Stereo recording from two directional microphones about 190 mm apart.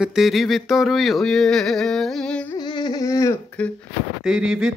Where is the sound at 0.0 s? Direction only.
Centre (ahead or behind).